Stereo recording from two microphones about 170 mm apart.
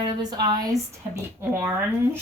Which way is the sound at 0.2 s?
25° right (ahead or behind).